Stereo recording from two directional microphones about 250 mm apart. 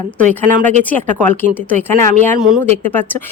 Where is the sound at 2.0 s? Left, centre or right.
Right.